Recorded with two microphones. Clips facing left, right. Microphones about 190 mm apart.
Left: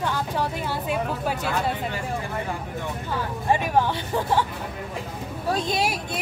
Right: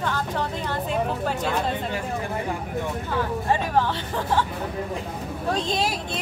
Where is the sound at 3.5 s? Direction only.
15° left (ahead or behind).